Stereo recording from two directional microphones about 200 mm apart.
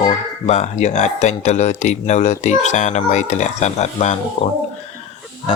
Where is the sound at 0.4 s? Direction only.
35° left (ahead or behind).